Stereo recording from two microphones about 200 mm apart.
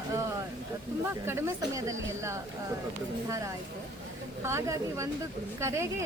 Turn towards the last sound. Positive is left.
turn(degrees=-15)  # may be behind; listen again after turning